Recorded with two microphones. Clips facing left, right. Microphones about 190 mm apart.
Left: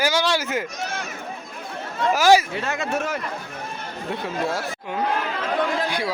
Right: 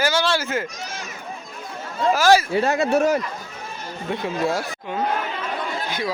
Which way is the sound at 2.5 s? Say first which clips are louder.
Right 7 dB; 40° right (ahead or behind).